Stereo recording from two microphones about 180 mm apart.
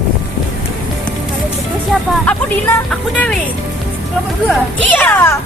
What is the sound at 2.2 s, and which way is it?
Speech, 10° left (ahead or behind).